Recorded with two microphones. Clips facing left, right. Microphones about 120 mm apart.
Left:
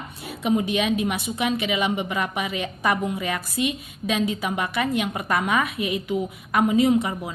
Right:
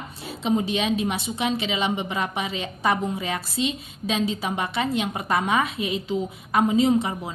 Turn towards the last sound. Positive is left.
turn(degrees=-25)  # may be behind; listen again after turning